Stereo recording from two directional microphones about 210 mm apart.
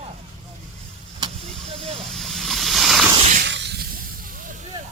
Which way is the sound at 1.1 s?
25° right (ahead or behind).